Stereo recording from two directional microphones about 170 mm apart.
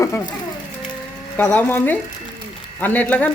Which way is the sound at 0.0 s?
15° left (ahead or behind).